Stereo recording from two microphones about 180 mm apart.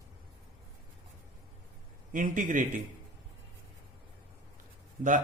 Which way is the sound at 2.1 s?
50° right (ahead or behind).